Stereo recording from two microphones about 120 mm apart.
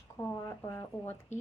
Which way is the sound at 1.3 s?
75° left (ahead or behind).